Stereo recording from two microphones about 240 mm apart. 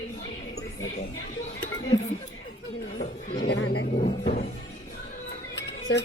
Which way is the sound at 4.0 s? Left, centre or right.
Left.